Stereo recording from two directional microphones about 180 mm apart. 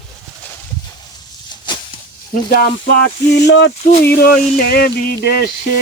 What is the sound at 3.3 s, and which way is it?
Speech, 70° left (ahead or behind).